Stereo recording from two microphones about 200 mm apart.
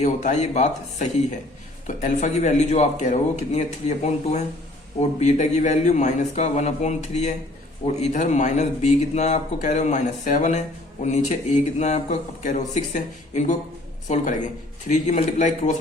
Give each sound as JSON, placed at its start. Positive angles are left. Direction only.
{"t": 0.0, "sound": "speech", "side_deg": 35}